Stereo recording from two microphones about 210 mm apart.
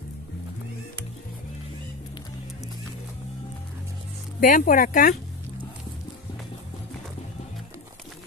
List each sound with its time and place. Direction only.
4.4 s speech: 40° left (ahead or behind)